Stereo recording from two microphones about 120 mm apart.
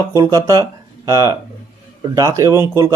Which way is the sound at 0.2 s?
30° right (ahead or behind).